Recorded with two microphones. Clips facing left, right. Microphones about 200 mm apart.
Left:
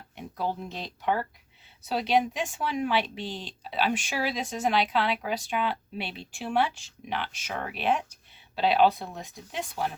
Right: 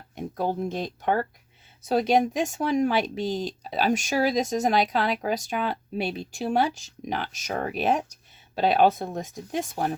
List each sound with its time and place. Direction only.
0.2 s speech: 50° right (ahead or behind)